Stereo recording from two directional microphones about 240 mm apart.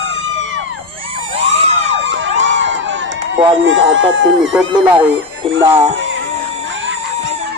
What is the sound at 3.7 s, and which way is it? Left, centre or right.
Speech, right.